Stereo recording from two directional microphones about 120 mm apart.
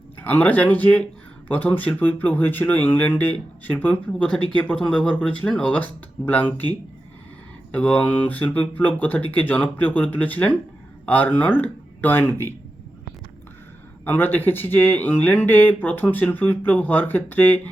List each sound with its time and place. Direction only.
0.2 s speech: 15° left (ahead or behind)
14.0 s speech: 15° left (ahead or behind)